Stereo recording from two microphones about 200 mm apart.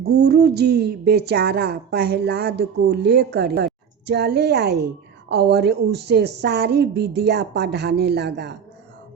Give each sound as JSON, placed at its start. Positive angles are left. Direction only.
{"t": 0.0, "sound": "a woman's voice", "side_deg": -55}